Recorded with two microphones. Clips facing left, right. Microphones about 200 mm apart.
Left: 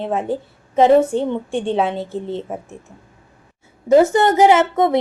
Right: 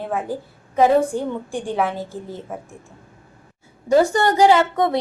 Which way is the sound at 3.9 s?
20° left (ahead or behind).